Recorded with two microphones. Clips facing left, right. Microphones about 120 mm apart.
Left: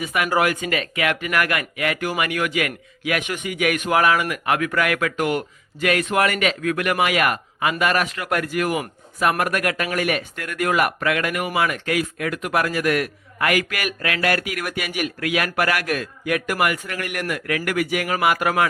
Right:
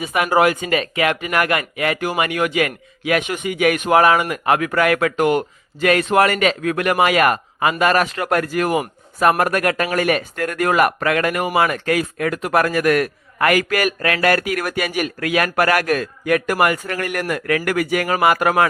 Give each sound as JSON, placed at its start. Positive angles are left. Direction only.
{"t": 0.0, "sound": "speech", "side_deg": -30}